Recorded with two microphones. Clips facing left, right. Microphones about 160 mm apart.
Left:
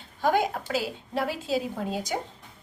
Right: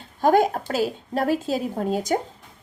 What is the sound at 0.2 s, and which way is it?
A woman's voice, 45° right (ahead or behind).